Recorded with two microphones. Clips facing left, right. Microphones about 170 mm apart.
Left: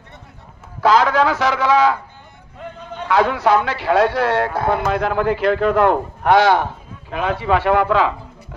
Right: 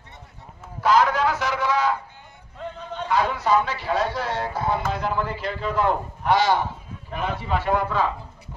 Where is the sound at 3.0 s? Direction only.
80° left; by 6.6 s 65° left (ahead or behind).